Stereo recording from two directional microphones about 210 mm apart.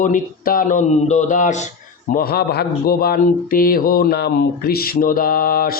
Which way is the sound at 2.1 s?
45° left (ahead or behind).